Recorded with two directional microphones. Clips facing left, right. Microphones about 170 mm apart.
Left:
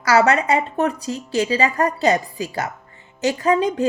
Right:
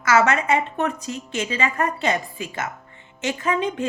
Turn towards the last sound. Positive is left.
turn(degrees=35)  # may be behind; listen again after turning